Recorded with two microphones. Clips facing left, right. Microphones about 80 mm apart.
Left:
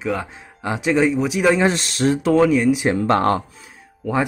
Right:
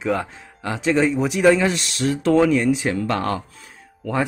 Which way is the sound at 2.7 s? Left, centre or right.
Left.